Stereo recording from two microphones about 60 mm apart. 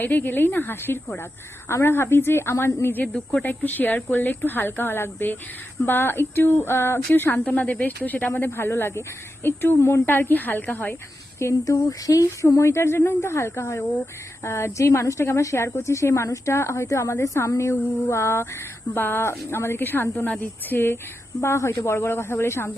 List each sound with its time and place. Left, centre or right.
0.0 s a woman's voice: left
3.1 s speech: centre
3.4 s speech: left
11.6 s a woman's voice: left
18.9 s speech: left
21.4 s a woman's voice: left